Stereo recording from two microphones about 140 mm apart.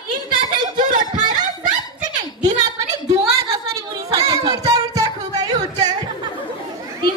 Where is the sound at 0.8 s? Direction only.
65° right (ahead or behind).